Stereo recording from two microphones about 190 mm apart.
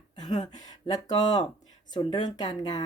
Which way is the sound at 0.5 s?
20° left (ahead or behind).